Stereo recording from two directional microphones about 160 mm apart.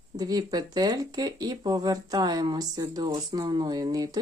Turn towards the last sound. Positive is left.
turn(degrees=-25)  # may be behind; listen again after turning